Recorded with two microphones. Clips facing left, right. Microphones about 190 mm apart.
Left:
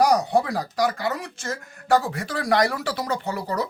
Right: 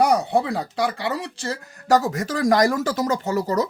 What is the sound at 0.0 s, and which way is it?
A man's voice, 25° right (ahead or behind).